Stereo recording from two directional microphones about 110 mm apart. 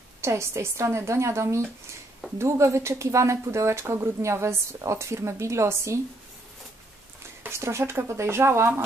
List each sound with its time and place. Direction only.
0.2 s speech: 25° right (ahead or behind)
7.4 s speech: 25° right (ahead or behind)